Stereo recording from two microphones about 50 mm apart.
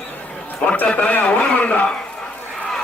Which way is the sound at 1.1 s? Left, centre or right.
Left.